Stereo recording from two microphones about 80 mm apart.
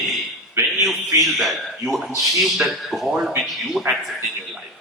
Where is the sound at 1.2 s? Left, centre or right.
Centre.